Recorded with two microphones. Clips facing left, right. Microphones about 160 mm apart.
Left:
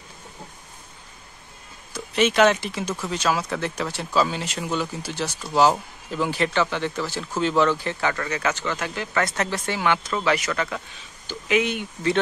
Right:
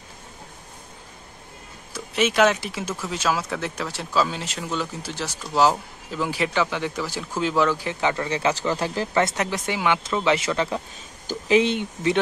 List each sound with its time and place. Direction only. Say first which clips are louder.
2.0 s speech: left 1 dB; 5° right (ahead or behind); by 9.2 s 30° right (ahead or behind)
9.2 s speech: left 1 dB; 15° right (ahead or behind)